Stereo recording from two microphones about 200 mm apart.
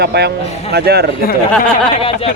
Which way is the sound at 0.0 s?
55° right (ahead or behind).